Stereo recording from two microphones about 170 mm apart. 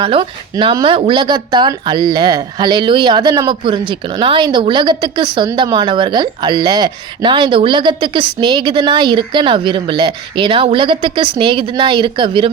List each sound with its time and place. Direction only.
0.0 s a woman's voice: 30° right (ahead or behind)